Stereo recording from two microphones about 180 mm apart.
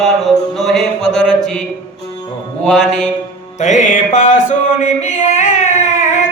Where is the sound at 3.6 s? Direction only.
40° left (ahead or behind).